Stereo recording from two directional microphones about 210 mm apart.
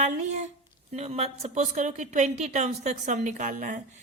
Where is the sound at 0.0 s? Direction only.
35° right (ahead or behind).